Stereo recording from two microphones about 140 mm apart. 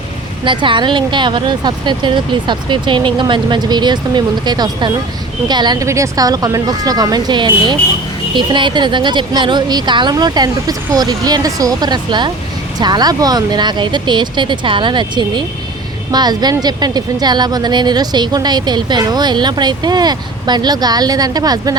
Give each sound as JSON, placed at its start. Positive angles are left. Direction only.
{"t": 0.4, "sound": "a woman's voice", "side_deg": -35}